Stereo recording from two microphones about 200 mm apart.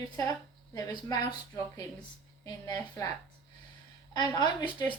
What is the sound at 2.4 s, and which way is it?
Speech, 15° left (ahead or behind).